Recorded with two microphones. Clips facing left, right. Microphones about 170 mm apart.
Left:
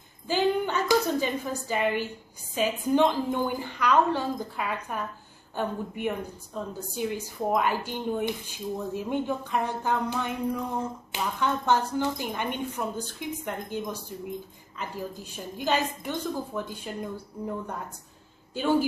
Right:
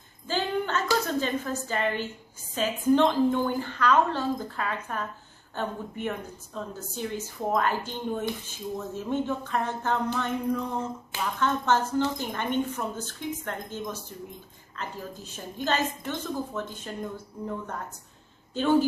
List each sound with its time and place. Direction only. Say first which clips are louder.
0.3 s a woman's voice: left 3 dB; 15° left (ahead or behind)
18.5 s speech: right 2 dB; 10° left (ahead or behind)